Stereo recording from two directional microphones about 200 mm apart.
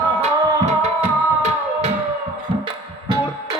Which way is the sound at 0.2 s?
35° right (ahead or behind).